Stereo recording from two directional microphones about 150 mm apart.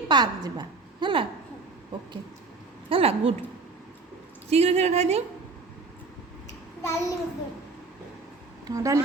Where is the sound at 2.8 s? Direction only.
40° right (ahead or behind).